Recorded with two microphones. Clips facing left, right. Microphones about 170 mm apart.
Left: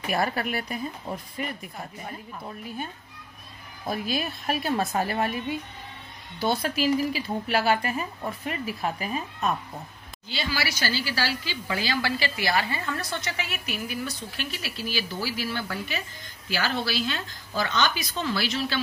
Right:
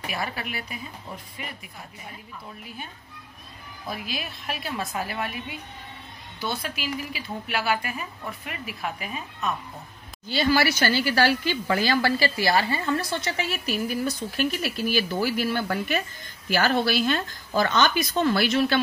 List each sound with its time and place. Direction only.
0.1 s speech: 45° left (ahead or behind)
3.8 s speech: 40° left (ahead or behind)
6.4 s speech: 40° left (ahead or behind)
10.3 s a woman's voice: 50° right (ahead or behind)